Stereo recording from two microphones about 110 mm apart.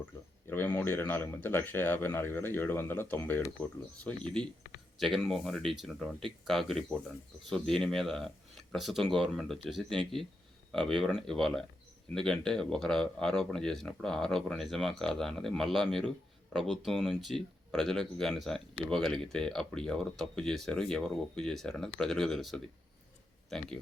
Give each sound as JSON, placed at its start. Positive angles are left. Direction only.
{"t": 0.5, "sound": "speech", "side_deg": 15}